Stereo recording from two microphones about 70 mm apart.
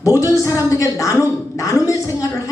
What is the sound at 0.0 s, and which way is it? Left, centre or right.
A woman's voice, left.